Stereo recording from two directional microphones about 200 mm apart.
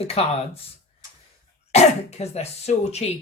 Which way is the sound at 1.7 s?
30° left (ahead or behind).